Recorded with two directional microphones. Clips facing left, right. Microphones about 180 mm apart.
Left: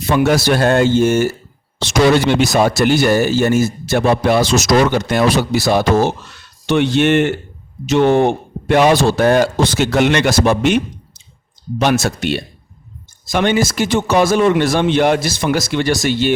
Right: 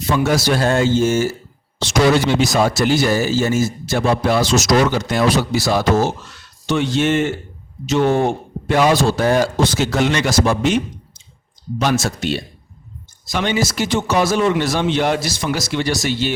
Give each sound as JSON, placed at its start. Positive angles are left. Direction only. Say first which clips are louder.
{"t": 0.1, "sound": "speech", "louder": "left 3 dB", "side_deg": 60}
{"t": 13.3, "sound": "a man's voice", "louder": "left 4 dB", "side_deg": 50}